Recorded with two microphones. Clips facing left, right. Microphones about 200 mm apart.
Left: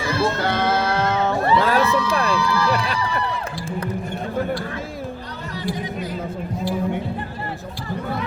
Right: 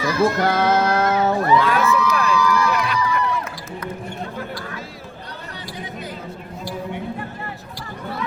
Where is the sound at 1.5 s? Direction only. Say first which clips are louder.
Even; 35° left (ahead or behind).